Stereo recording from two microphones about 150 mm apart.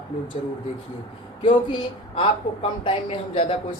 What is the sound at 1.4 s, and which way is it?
Speech, 35° left (ahead or behind).